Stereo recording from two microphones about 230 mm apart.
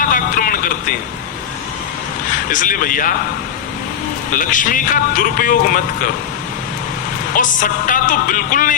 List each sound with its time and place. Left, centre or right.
0.0 s music: left
2.3 s speech: left
4.4 s speech: left
7.3 s speech: left